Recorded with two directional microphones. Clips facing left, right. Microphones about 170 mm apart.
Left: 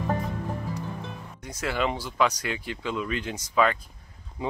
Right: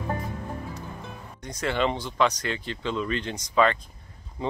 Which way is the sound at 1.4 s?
5° left (ahead or behind).